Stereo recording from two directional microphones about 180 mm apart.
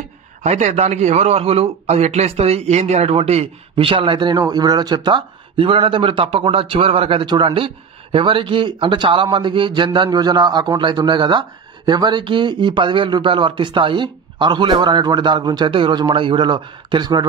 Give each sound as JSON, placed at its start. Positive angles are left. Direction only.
{"t": 0.4, "sound": "a man's voice", "side_deg": -40}